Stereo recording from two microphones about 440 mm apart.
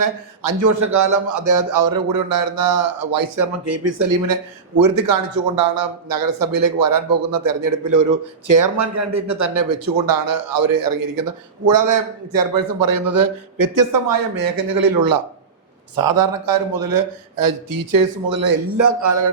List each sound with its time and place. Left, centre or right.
0.0 s speech: right
4.8 s speech: right